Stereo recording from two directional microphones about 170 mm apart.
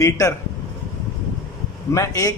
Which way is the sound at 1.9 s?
20° left (ahead or behind).